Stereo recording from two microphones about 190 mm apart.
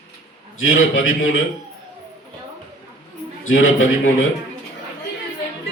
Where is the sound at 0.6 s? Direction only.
90° left.